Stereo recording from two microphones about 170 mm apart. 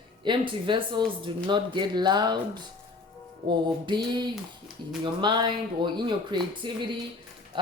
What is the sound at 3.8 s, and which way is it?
Speech, 25° right (ahead or behind).